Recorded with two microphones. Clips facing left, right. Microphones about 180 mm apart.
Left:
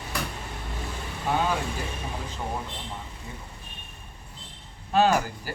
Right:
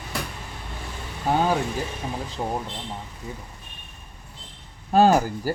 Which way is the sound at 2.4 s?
30° right (ahead or behind).